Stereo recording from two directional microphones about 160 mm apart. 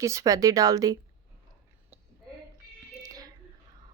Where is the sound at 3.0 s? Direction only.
25° right (ahead or behind).